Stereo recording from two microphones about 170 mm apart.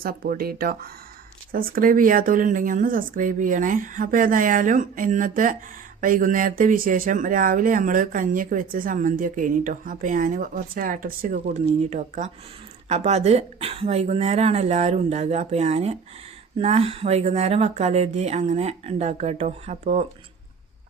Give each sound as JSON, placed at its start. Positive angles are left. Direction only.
{"t": 0.0, "sound": "speech", "side_deg": -60}